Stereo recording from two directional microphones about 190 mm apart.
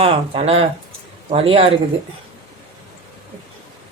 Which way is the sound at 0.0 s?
30° right (ahead or behind).